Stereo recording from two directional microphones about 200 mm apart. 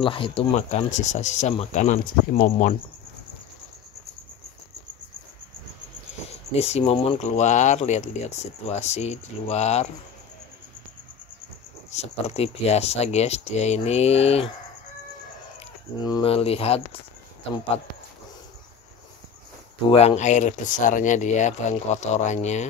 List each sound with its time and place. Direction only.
0.0 s speech: 25° left (ahead or behind)
6.5 s speech: 30° left (ahead or behind)
11.9 s speech: 35° left (ahead or behind)
16.0 s speech: 20° left (ahead or behind)
19.9 s speech: 30° left (ahead or behind)